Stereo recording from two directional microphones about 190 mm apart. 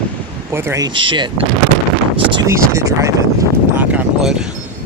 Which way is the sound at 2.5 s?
15° right (ahead or behind).